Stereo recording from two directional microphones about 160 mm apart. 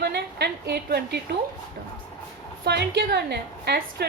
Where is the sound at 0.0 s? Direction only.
80° right.